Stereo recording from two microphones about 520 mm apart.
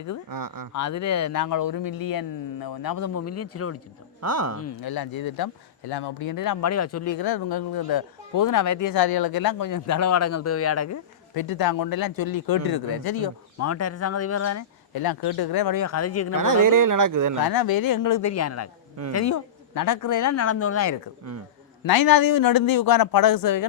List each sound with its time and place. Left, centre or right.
0.3 s speech: right
0.7 s speech: left
3.2 s speech: left
4.2 s speech: right
4.8 s speech: left
11.3 s speech: left
13.6 s speech: left
15.0 s speech: left
16.3 s speech: right
17.5 s speech: left
21.8 s speech: left